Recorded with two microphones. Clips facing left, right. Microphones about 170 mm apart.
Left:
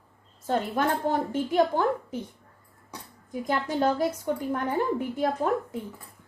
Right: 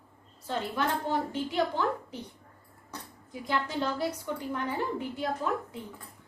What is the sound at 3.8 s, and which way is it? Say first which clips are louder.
A woman's voice: left 6 dB; 45° left (ahead or behind).